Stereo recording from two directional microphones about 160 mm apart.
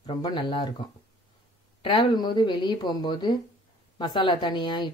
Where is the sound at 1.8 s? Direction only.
30° left (ahead or behind).